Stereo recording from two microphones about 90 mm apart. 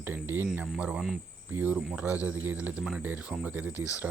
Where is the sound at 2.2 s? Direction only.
20° right (ahead or behind).